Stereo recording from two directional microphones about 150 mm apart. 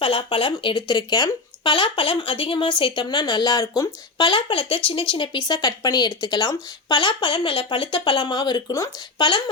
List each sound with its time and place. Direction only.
0.0 s speech: 35° left (ahead or behind)